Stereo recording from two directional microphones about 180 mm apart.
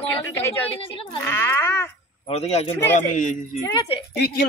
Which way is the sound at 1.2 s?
15° left (ahead or behind).